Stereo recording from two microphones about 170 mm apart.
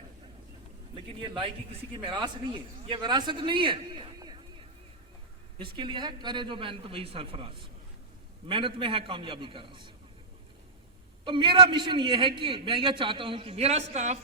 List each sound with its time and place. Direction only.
2.0 s a man's voice: 25° right (ahead or behind)
5.5 s a man's voice: 30° right (ahead or behind)
11.3 s a man's voice: 30° right (ahead or behind)